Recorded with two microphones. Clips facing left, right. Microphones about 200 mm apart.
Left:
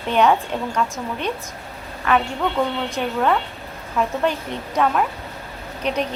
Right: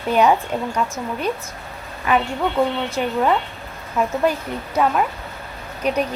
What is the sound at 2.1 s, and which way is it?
A woman's voice, 10° right (ahead or behind).